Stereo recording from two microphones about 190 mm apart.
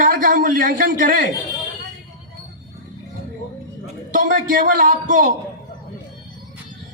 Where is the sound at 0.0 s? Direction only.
45° right (ahead or behind).